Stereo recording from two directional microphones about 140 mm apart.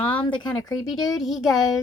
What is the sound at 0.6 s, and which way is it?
Speech, 25° left (ahead or behind).